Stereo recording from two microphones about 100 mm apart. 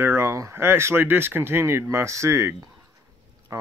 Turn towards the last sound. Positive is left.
turn(degrees=-35)  # may be behind; listen again after turning